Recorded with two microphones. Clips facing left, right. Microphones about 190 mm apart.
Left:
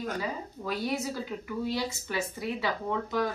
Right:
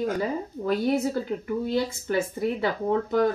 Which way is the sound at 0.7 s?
50° right (ahead or behind).